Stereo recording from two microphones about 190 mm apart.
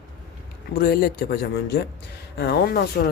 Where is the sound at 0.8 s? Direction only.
50° left (ahead or behind).